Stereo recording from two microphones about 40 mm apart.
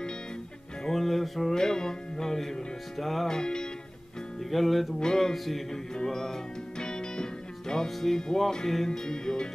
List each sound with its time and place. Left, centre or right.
0.8 s music: centre
1.5 s music: centre
3.3 s music: centre
4.5 s music: centre
5.0 s music: centre
5.3 s music: centre